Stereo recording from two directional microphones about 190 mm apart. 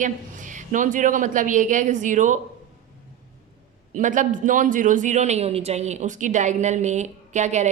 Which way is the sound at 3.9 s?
40° right (ahead or behind).